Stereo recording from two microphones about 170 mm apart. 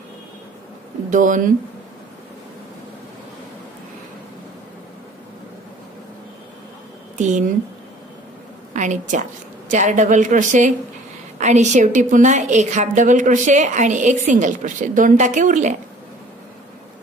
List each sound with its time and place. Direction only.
1.1 s a woman's voice: 50° right (ahead or behind)
8.7 s a woman's voice: 45° right (ahead or behind)